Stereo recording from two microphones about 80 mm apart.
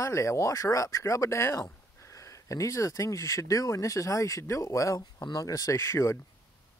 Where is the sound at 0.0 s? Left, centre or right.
Left.